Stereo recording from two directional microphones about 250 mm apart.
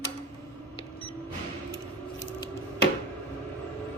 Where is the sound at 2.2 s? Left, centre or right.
Left.